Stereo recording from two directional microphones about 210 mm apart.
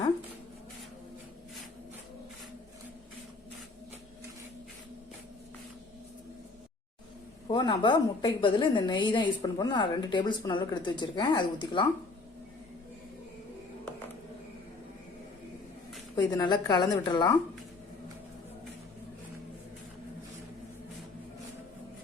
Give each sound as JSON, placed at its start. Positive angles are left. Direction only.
{"t": 7.4, "sound": "a woman's voice", "side_deg": 25}
{"t": 16.1, "sound": "a woman's voice", "side_deg": 20}